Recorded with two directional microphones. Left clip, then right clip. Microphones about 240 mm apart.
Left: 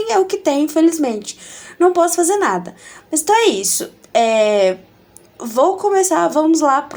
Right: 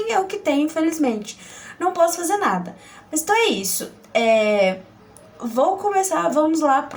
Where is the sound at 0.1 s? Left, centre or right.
Left.